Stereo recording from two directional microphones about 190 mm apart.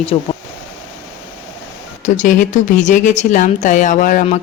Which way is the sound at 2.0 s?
40° left (ahead or behind).